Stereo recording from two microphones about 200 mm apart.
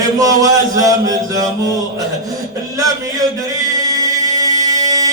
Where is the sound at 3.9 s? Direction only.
15° right (ahead or behind).